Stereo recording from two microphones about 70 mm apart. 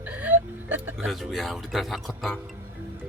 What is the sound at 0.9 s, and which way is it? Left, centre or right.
Speech, centre.